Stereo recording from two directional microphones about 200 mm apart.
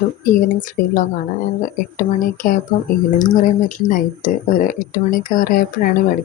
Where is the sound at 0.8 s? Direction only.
45° left (ahead or behind).